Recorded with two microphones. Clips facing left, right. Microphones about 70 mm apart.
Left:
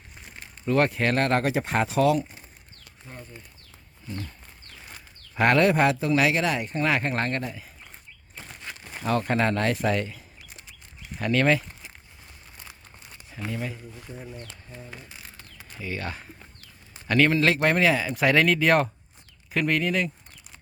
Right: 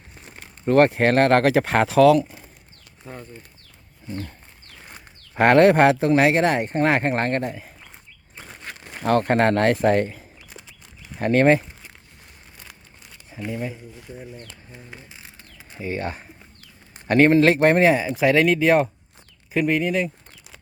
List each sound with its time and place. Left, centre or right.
0.6 s speech: right
1.4 s speech: right
1.7 s speech: right
4.9 s a sound: right
6.0 s a man's voice: right
13.5 s speech: centre
13.9 s speech: centre
14.7 s a sound: centre
15.8 s a man's voice: right
18.1 s speech: centre